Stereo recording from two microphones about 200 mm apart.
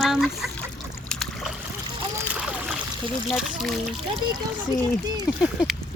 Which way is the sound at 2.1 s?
5° right (ahead or behind).